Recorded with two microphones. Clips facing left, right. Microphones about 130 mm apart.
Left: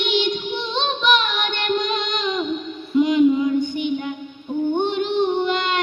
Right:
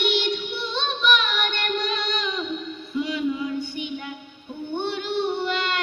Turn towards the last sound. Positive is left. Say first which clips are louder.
# left 5 dB
turn(degrees=20)  # may be behind; listen again after turning